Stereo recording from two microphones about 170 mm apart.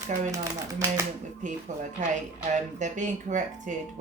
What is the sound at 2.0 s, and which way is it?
Speech, 50° right (ahead or behind).